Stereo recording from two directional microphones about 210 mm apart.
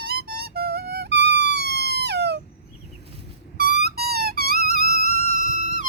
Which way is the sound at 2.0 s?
55° right (ahead or behind).